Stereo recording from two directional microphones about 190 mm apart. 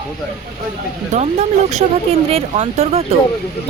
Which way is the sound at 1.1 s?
35° right (ahead or behind).